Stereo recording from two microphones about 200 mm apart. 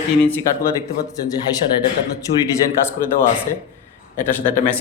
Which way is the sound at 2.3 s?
35° left (ahead or behind).